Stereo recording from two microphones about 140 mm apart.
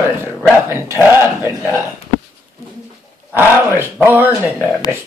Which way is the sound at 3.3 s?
15° right (ahead or behind).